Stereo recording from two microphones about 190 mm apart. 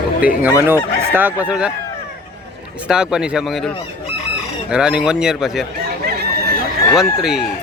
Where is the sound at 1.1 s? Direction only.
10° right (ahead or behind).